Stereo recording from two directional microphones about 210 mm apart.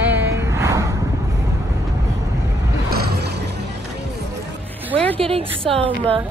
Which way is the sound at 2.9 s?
50° right (ahead or behind).